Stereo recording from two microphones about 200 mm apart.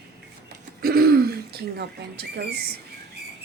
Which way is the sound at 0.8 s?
50° right (ahead or behind).